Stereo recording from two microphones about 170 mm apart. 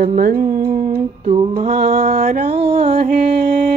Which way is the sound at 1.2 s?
35° right (ahead or behind).